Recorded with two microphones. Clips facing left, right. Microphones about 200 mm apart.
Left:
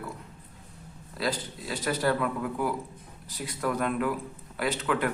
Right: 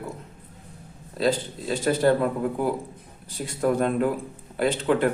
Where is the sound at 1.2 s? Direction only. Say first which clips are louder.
Right 7 dB; 25° right (ahead or behind).